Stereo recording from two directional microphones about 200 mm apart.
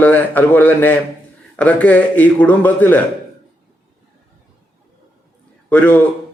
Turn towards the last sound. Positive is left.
turn(degrees=10)  # may be behind; listen again after turning